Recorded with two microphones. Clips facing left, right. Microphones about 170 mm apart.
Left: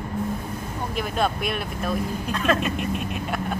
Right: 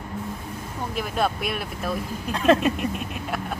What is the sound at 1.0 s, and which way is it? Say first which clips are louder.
Speech: even; centre (ahead or behind).